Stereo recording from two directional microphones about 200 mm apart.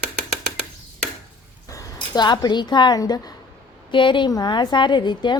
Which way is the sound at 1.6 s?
20° left (ahead or behind).